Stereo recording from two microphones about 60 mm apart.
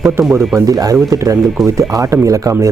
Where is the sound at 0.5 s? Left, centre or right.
Right.